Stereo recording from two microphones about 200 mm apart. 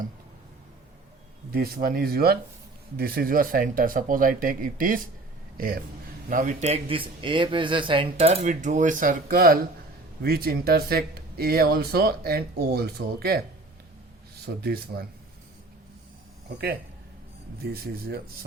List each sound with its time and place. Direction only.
1.5 s speech: 50° right (ahead or behind)
14.4 s speech: 50° right (ahead or behind)
16.5 s speech: 50° right (ahead or behind)